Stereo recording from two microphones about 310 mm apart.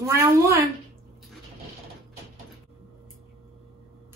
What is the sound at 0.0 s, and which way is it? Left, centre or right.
Speech, centre.